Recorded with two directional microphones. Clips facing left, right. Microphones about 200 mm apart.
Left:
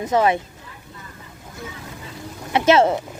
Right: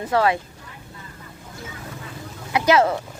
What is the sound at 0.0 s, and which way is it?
Speech, 20° left (ahead or behind).